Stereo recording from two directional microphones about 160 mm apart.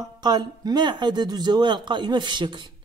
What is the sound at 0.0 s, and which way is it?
Speech, 25° right (ahead or behind).